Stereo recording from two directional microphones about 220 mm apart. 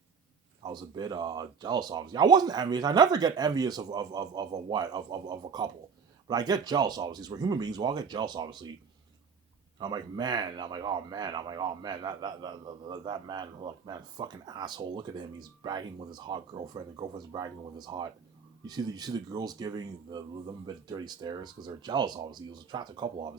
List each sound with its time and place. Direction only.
0.6 s speech: 20° right (ahead or behind)
9.7 s speech: 20° right (ahead or behind)